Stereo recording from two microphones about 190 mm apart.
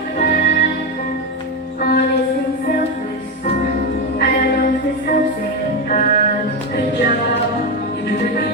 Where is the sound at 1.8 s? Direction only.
55° left (ahead or behind).